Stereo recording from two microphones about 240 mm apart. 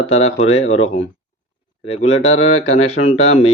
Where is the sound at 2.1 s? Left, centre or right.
Left.